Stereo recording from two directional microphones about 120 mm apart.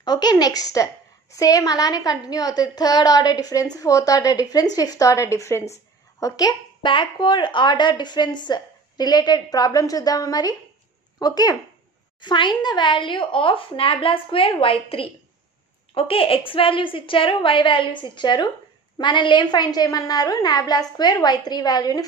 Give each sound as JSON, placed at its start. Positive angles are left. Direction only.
{"t": 0.0, "sound": "a woman's voice", "side_deg": 35}